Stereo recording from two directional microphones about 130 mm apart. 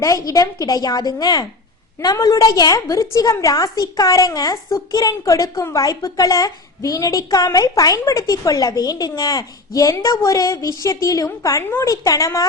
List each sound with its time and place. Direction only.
0.0 s a woman's voice: 25° left (ahead or behind)